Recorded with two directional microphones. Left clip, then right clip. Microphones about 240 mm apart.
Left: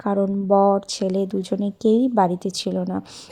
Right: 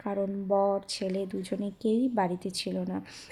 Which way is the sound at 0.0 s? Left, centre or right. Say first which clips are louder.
Left 9 dB; left.